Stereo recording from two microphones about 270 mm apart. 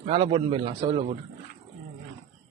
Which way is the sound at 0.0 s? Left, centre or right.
Right.